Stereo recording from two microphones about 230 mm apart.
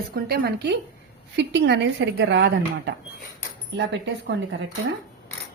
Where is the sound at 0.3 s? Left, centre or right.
Right.